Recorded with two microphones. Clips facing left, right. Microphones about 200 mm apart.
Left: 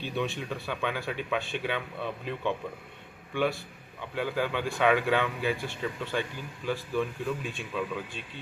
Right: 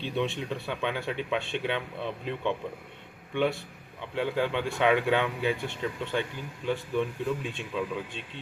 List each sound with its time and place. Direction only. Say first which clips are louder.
0.0 s speech: right 2 dB; 25° right (ahead or behind)